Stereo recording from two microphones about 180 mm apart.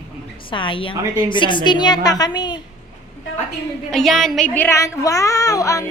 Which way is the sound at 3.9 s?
Centre (ahead or behind).